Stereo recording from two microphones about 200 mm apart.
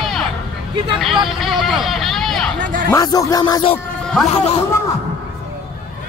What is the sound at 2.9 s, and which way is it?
Speech, 15° left (ahead or behind).